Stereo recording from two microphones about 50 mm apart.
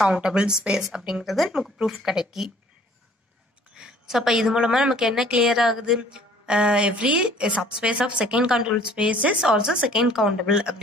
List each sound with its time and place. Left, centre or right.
0.0 s a woman's voice: centre
3.7 s a woman's voice: centre
9.4 s a woman's voice: centre